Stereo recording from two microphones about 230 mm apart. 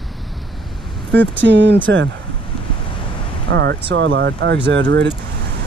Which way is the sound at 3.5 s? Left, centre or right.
Right.